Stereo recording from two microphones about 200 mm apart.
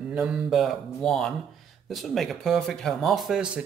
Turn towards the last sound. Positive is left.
turn(degrees=-5)  # may be behind; listen again after turning